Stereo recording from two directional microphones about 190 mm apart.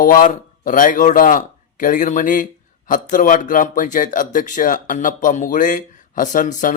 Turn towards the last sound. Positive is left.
turn(degrees=45)  # may be behind; listen again after turning